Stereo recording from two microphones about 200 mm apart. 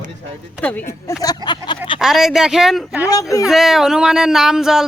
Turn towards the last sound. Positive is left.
turn(degrees=0)  # may be behind; listen again after turning